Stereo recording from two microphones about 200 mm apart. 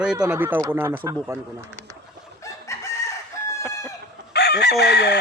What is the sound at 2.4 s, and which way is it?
Chicken, 15° left (ahead or behind).